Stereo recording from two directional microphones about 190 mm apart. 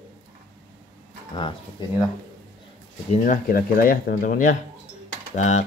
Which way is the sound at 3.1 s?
40° left (ahead or behind).